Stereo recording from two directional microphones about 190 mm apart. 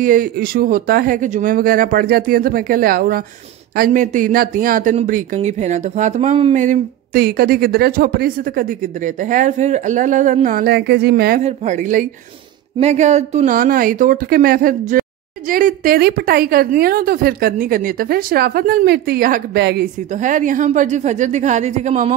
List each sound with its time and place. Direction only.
0.0 s speech: 45° right (ahead or behind)
11.4 s a woman's voice: 40° right (ahead or behind)
13.6 s speech: 50° right (ahead or behind)
20.2 s a woman's voice: 40° right (ahead or behind)